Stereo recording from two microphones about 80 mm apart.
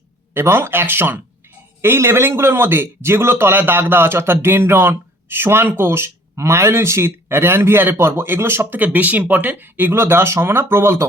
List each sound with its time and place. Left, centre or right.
0.3 s a man's voice: right